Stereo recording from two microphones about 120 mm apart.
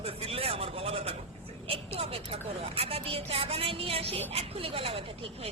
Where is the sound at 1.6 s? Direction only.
50° right (ahead or behind).